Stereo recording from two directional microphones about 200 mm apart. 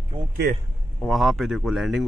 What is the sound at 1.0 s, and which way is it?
Speech, centre (ahead or behind).